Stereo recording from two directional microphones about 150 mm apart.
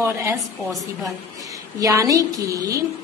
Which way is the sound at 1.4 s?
25° right (ahead or behind).